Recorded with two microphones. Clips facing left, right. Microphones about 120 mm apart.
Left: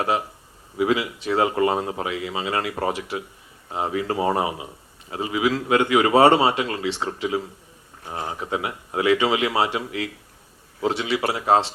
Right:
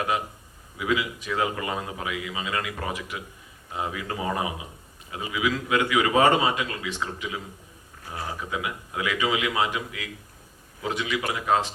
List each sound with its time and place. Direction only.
0.8 s speech: 35° left (ahead or behind)